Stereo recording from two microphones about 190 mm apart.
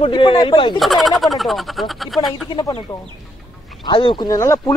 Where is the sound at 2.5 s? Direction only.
25° left (ahead or behind).